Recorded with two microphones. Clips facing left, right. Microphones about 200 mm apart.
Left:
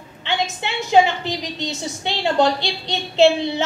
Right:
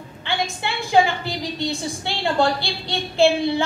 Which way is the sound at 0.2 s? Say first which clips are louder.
Left 1 dB; 20° left (ahead or behind).